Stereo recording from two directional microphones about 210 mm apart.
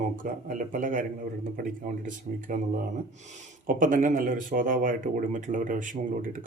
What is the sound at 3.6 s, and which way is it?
Speech, 40° right (ahead or behind).